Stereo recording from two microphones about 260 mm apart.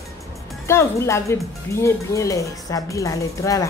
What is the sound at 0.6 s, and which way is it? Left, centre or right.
Speech, centre.